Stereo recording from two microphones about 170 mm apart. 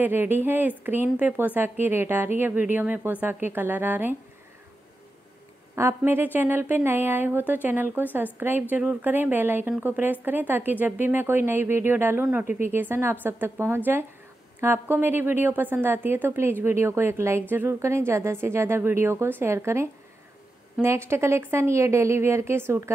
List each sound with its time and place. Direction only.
0.0 s a woman's voice: 10° right (ahead or behind)
5.8 s a woman's voice: 15° right (ahead or behind)